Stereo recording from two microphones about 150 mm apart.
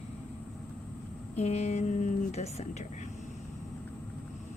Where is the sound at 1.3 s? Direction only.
45° left (ahead or behind).